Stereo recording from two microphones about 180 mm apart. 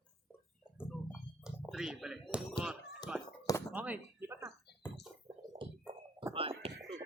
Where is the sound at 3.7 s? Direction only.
10° right (ahead or behind).